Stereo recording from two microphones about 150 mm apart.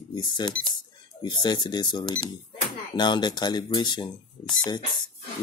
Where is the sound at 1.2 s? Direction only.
30° left (ahead or behind).